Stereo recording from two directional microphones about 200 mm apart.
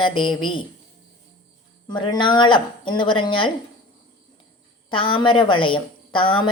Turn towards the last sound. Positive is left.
turn(degrees=25)  # may be behind; listen again after turning